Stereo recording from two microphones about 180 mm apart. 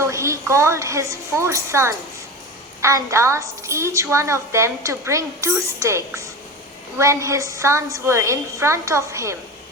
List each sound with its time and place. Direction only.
0.0 s a woman's voice: 15° right (ahead or behind)